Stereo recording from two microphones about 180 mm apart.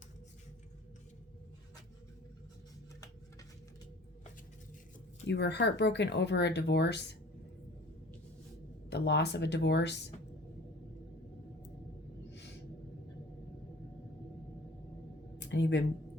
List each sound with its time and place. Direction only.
5.3 s speech: 70° left (ahead or behind)
8.9 s speech: 70° left (ahead or behind)
15.4 s a sound: 75° left (ahead or behind)